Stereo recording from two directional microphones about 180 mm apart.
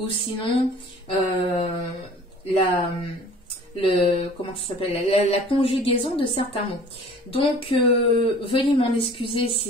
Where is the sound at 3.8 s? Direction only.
30° left (ahead or behind).